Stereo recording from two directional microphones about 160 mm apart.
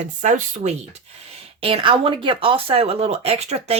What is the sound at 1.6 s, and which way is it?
A woman's voice, 35° right (ahead or behind).